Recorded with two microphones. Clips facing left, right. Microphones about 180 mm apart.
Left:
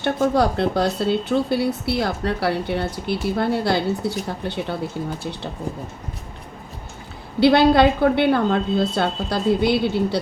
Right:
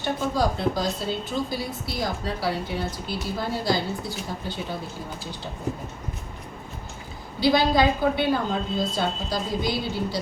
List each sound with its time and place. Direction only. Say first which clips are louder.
0.0 s speech: left 6 dB; 65° left (ahead or behind)
7.3 s speech: left 6 dB; 65° left (ahead or behind)